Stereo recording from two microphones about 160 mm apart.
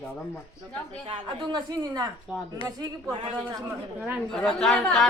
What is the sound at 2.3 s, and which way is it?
Speech, 5° right (ahead or behind).